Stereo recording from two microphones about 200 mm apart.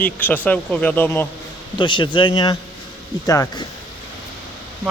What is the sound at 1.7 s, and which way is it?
Speech, 25° left (ahead or behind).